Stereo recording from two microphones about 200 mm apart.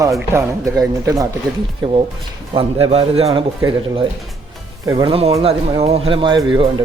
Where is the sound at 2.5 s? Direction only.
25° right (ahead or behind).